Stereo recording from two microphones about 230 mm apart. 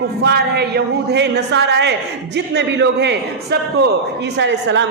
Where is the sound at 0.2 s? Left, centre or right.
Right.